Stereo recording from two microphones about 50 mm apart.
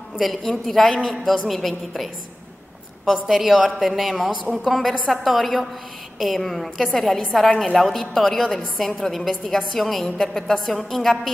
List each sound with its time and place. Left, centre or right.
0.2 s a woman's voice: centre
3.1 s a woman's voice: centre